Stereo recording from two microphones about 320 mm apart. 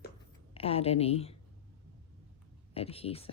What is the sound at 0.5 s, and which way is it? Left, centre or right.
Speech, centre.